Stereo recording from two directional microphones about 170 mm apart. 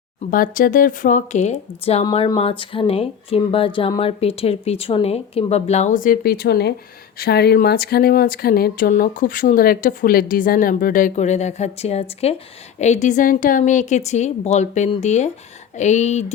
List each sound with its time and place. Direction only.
0.3 s speech: 55° left (ahead or behind)